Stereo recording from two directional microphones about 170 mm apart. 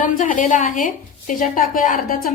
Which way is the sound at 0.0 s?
50° left (ahead or behind).